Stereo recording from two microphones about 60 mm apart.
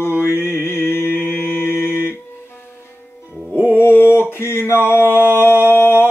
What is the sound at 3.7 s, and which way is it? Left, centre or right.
Mantra, left.